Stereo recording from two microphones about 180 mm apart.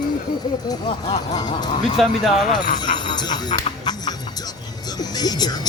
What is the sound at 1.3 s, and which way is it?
Speech, 25° left (ahead or behind).